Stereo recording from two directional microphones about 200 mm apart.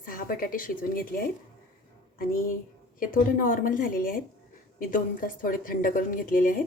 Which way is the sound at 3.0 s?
40° left (ahead or behind).